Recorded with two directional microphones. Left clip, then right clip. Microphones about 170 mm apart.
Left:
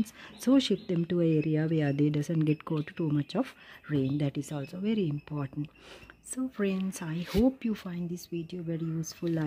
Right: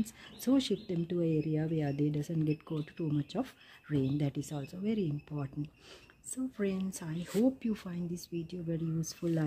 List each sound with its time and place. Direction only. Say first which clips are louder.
0.4 s speech: left 5 dB; 15° left (ahead or behind)